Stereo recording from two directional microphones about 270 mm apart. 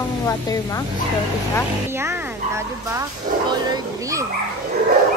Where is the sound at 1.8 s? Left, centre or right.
Centre.